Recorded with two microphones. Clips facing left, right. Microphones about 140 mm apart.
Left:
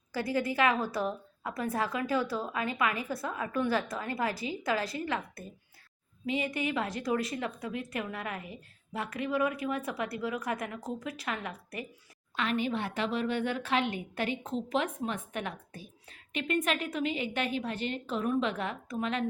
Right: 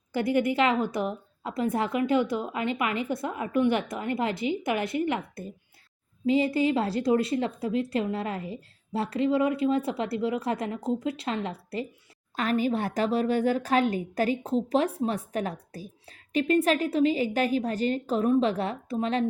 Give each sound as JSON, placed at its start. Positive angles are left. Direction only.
{"t": 0.1, "sound": "a woman's voice", "side_deg": -20}
{"t": 12.4, "sound": "a woman's voice", "side_deg": -40}